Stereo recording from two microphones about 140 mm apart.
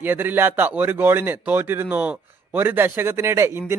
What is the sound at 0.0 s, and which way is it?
A man's voice, 15° right (ahead or behind).